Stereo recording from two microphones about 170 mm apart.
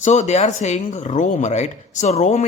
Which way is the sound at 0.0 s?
45° left (ahead or behind).